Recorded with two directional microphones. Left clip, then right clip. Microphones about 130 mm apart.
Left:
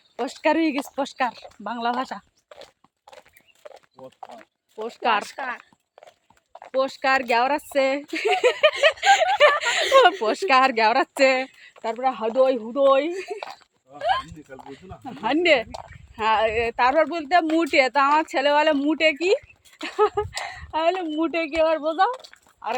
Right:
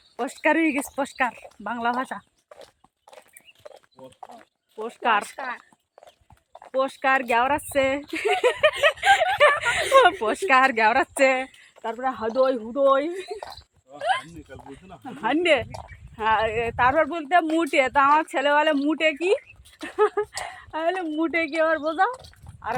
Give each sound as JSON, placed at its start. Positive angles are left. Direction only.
{"t": 0.2, "sound": "speech", "side_deg": -5}
{"t": 3.2, "sound": "horse", "side_deg": 25}
{"t": 4.2, "sound": "speech", "side_deg": 20}
{"t": 4.9, "sound": "speech", "side_deg": -5}
{"t": 5.3, "sound": "a sound", "side_deg": 25}
{"t": 6.7, "sound": "speech", "side_deg": 0}
{"t": 9.4, "sound": "a sound", "side_deg": 0}
{"t": 9.9, "sound": "speech", "side_deg": 5}
{"t": 13.1, "sound": "speech", "side_deg": 20}
{"t": 14.0, "sound": "a sound", "side_deg": 20}
{"t": 14.7, "sound": "speech", "side_deg": 0}
{"t": 22.1, "sound": "speech", "side_deg": 30}